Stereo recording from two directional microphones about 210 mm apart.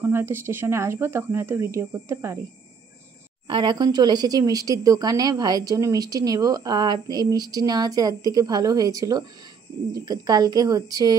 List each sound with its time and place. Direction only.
0.0 s a woman's voice: 10° right (ahead or behind)
3.4 s a woman's voice: 20° right (ahead or behind)